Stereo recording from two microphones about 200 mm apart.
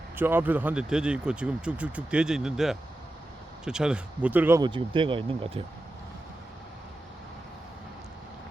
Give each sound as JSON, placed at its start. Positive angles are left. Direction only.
{"t": 0.2, "sound": "speech", "side_deg": -10}
{"t": 4.6, "sound": "speech", "side_deg": -25}